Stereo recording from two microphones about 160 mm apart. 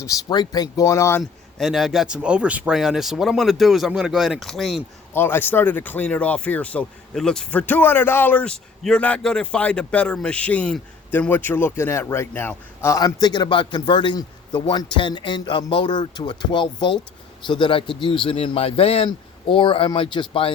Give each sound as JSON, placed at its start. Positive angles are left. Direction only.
{"t": 0.0, "sound": "speech", "side_deg": 25}
{"t": 1.2, "sound": "speech", "side_deg": 0}
{"t": 5.1, "sound": "speech", "side_deg": 15}